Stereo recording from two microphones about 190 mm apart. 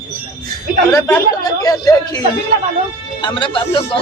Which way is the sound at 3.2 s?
25° left (ahead or behind).